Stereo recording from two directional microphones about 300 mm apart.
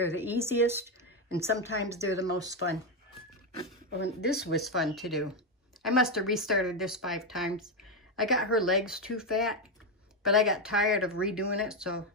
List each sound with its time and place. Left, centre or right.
0.2 s speech: centre
3.9 s speech: left
4.6 s speech: centre